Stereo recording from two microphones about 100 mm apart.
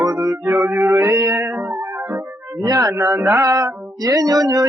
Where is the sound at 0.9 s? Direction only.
40° right (ahead or behind).